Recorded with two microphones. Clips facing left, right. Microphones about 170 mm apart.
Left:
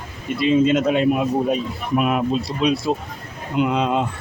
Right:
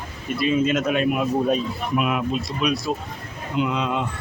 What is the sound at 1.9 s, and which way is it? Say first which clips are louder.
Speech: left 4 dB; 40° left (ahead or behind).